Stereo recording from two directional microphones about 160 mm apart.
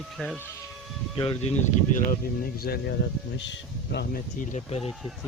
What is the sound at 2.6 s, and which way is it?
Speech, 75° left (ahead or behind).